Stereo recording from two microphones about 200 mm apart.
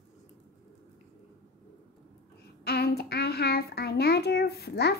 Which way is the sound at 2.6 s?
50° left (ahead or behind).